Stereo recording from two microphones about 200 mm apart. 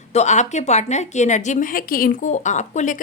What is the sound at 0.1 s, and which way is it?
A woman's voice, 35° left (ahead or behind).